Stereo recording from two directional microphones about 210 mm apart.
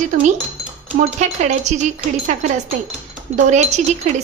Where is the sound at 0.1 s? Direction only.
35° right (ahead or behind).